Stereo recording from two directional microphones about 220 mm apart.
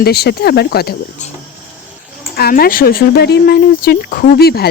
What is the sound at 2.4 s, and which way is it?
Speech, 40° left (ahead or behind).